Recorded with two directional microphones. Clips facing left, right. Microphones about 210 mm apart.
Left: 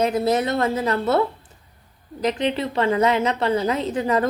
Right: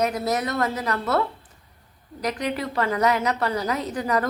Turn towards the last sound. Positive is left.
turn(degrees=25)  # may be behind; listen again after turning